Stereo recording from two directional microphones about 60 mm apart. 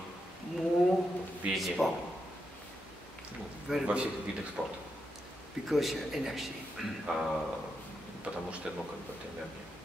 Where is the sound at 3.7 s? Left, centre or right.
Centre.